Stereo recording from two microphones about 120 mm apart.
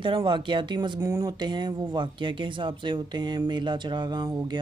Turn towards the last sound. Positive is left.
turn(degrees=-35)  # may be behind; listen again after turning